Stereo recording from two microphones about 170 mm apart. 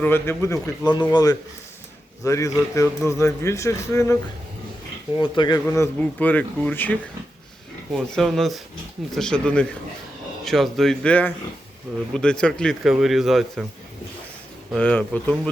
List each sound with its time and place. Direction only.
0.0 s a man's voice: 15° left (ahead or behind)
5.1 s speech: 25° left (ahead or behind)
5.5 s a man's voice: 15° left (ahead or behind)
7.9 s speech: centre (ahead or behind)
14.7 s a man's voice: 10° left (ahead or behind)